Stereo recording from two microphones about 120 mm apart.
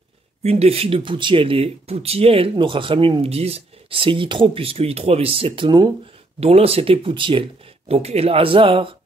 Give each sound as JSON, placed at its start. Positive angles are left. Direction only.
{"t": 0.4, "sound": "speech", "side_deg": -60}
{"t": 7.9, "sound": "speech", "side_deg": -60}